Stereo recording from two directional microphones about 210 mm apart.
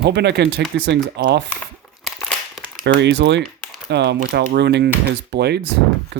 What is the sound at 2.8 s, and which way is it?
Speech, 55° right (ahead or behind).